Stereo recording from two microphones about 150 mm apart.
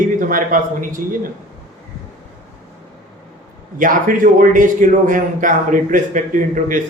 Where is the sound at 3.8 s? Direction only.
65° right (ahead or behind).